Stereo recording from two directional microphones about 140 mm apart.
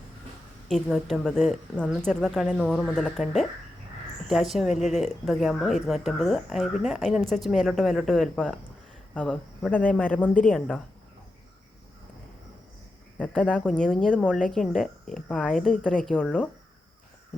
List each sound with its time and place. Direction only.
0.7 s a woman's voice: centre (ahead or behind)
13.1 s a woman's voice: 10° left (ahead or behind)